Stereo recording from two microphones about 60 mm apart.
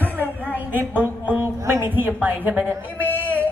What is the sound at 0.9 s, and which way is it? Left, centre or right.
Music, right.